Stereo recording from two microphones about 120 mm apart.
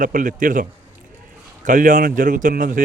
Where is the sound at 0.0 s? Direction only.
90° right.